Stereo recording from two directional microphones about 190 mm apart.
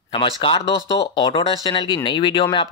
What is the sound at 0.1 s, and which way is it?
Speech, 25° left (ahead or behind).